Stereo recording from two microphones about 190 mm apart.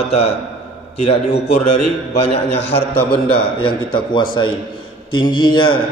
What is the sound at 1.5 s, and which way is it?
A man's voice, 35° left (ahead or behind).